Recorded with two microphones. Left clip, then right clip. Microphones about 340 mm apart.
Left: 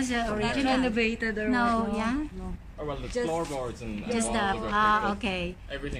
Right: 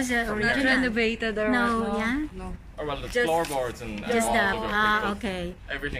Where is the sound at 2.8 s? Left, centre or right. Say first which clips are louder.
Right 5 dB; right.